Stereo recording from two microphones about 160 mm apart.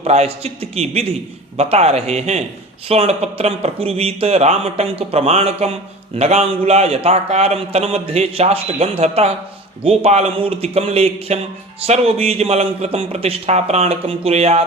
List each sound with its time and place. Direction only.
0.0 s speech: 40° right (ahead or behind)